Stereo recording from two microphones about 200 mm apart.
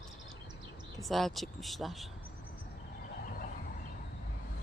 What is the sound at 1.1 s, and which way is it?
Speech, centre (ahead or behind).